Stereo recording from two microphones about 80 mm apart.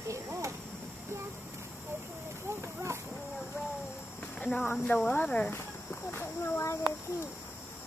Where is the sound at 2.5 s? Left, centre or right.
Right.